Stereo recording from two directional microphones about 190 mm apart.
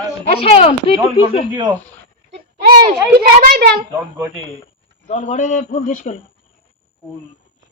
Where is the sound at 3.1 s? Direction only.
55° right (ahead or behind).